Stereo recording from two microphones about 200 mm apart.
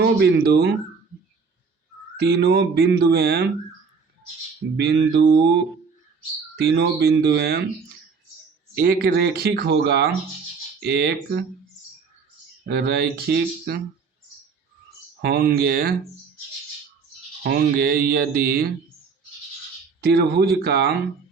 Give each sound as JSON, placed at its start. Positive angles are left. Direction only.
{"t": 0.0, "sound": "speech", "side_deg": -55}
{"t": 2.1, "sound": "speech", "side_deg": -55}
{"t": 4.8, "sound": "speech", "side_deg": -55}
{"t": 6.6, "sound": "speech", "side_deg": -55}
{"t": 8.7, "sound": "speech", "side_deg": -50}
{"t": 12.6, "sound": "speech", "side_deg": -55}
{"t": 15.2, "sound": "speech", "side_deg": -50}
{"t": 17.4, "sound": "speech", "side_deg": -50}
{"t": 20.0, "sound": "speech", "side_deg": -50}